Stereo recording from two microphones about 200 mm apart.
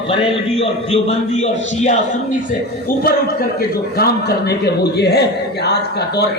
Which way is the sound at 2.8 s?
50° left (ahead or behind).